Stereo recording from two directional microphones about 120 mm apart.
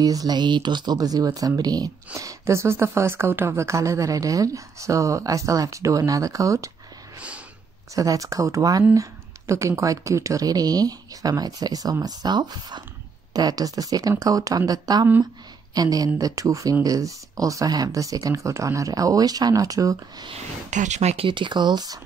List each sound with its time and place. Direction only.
0.0 s speech: 30° right (ahead or behind)
7.2 s snort: 10° right (ahead or behind)
7.9 s speech: 30° right (ahead or behind)
20.7 s speech: 80° right; by 21.3 s 65° right (ahead or behind)
21.3 s speech: 40° right (ahead or behind)